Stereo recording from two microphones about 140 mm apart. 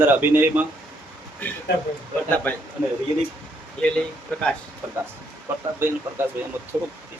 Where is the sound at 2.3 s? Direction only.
10° left (ahead or behind).